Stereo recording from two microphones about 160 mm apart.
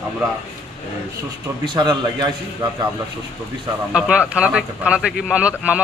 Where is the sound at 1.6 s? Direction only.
30° right (ahead or behind).